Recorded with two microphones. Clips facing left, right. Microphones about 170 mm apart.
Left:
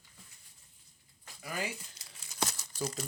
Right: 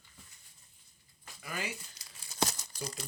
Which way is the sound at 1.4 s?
40° left (ahead or behind).